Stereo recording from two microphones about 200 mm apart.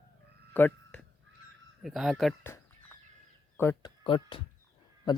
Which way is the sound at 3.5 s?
10° left (ahead or behind).